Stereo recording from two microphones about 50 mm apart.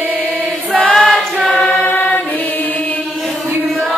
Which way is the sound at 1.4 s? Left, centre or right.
Left.